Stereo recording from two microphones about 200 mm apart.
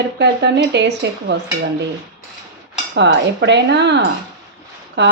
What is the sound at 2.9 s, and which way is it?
A woman's voice, 60° right (ahead or behind).